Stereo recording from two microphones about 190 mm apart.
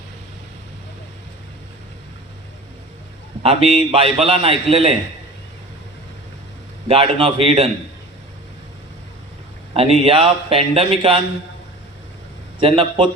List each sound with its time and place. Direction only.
3.4 s a man's voice: 30° right (ahead or behind)
6.8 s a man's voice: 30° right (ahead or behind)
9.7 s a man's voice: 30° right (ahead or behind)
12.5 s a man's voice: 30° right (ahead or behind)